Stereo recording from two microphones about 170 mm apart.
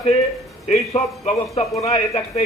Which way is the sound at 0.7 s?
35° left (ahead or behind).